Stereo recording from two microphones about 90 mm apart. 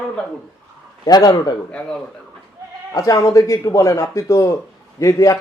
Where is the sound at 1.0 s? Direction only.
50° left (ahead or behind).